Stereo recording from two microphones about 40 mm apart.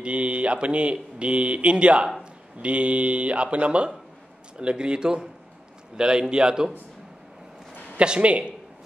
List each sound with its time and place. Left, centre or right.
0.0 s speech: right
8.0 s speech: right